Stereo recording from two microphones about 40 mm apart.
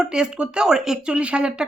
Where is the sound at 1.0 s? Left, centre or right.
Right.